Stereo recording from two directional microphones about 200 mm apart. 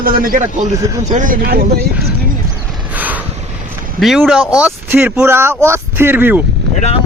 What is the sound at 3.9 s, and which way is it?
Speech, centre (ahead or behind).